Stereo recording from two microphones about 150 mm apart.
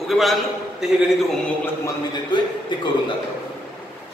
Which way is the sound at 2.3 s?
30° left (ahead or behind).